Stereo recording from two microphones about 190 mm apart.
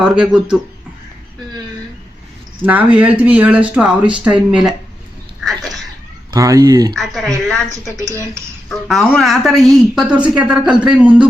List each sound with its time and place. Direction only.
0.0 s speech: 5° right (ahead or behind)
2.6 s speech: 10° right (ahead or behind)
5.4 s a sound: centre (ahead or behind)
6.3 s speech: 20° right (ahead or behind)
6.9 s speech: centre (ahead or behind)
8.7 s speech: centre (ahead or behind)